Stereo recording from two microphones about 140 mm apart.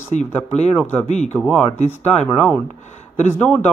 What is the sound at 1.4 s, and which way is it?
Speech, 5° left (ahead or behind).